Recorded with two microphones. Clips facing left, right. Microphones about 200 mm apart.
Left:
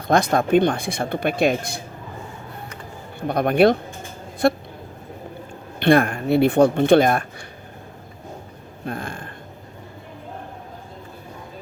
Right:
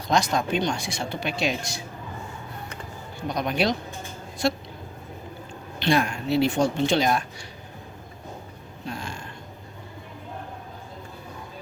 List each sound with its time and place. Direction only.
0.1 s speech: 55° left (ahead or behind)
3.2 s speech: 55° left (ahead or behind)
5.8 s speech: 55° left (ahead or behind)
8.8 s a sound: 55° left (ahead or behind)